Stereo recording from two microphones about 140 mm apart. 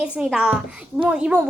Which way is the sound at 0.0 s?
5° right (ahead or behind).